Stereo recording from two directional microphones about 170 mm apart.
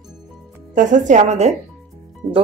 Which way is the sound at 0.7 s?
50° right (ahead or behind).